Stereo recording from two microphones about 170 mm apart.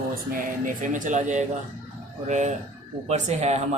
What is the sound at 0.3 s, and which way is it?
Speech, 55° right (ahead or behind).